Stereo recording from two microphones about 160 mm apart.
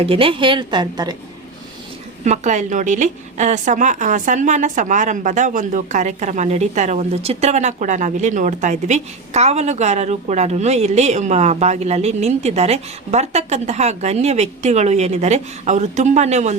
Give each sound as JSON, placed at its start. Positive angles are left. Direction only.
{"t": 0.0, "sound": "a woman's voice", "side_deg": -35}
{"t": 2.2, "sound": "a woman's voice", "side_deg": -50}